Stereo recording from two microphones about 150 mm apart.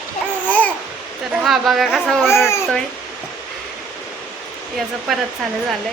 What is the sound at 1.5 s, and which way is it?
Speech, centre (ahead or behind).